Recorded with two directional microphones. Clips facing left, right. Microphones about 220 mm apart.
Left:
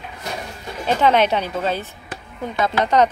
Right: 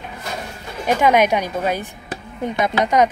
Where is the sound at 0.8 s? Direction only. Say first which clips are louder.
Right 1 dB; 10° right (ahead or behind).